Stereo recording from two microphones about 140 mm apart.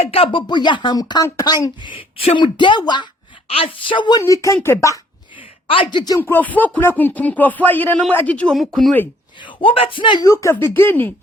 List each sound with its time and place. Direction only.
0.0 s speech: 45° left (ahead or behind)
4.2 s speech: 20° left (ahead or behind)
5.4 s a sound: 40° left (ahead or behind)
6.1 s speech: 15° left (ahead or behind)
9.4 s speech: 35° left (ahead or behind)
10.3 s speech: 20° left (ahead or behind)